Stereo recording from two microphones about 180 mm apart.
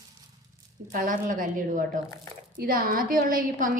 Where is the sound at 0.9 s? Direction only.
50° right (ahead or behind).